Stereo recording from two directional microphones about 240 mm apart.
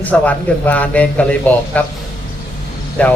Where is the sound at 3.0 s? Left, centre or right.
Centre.